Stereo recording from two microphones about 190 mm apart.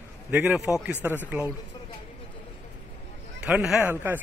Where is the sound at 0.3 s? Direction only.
5° right (ahead or behind).